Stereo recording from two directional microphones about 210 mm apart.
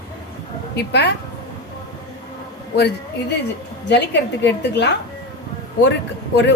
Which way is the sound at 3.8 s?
55° left (ahead or behind).